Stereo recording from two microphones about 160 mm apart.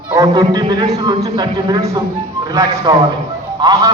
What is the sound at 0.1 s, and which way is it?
Speech, 25° right (ahead or behind).